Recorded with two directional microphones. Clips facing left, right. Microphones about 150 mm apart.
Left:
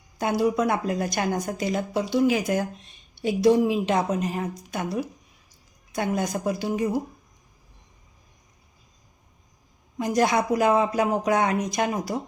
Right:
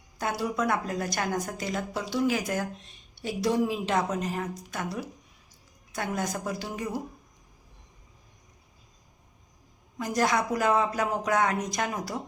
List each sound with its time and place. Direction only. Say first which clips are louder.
0.2 s speech: left 6 dB; 20° left (ahead or behind)
10.0 s speech: left 4 dB; 20° left (ahead or behind)